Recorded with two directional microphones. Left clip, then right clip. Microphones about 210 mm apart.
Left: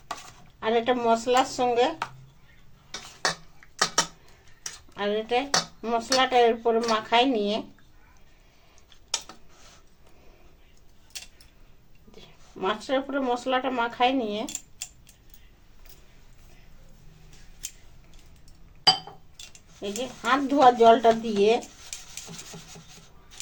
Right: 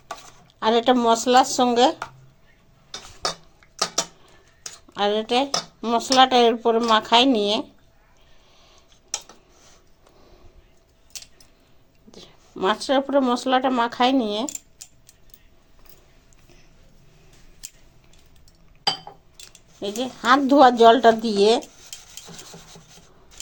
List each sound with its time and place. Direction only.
0.6 s speech: 45° right (ahead or behind)
4.9 s speech: 45° right (ahead or behind)
12.1 s speech: 45° right (ahead or behind)
19.5 s speech: 45° right (ahead or behind)